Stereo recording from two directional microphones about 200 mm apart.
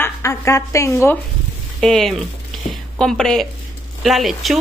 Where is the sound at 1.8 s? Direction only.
Centre (ahead or behind).